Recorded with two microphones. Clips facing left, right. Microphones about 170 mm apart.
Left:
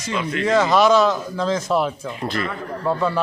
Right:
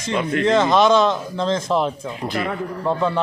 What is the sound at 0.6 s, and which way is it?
Speech, 5° left (ahead or behind).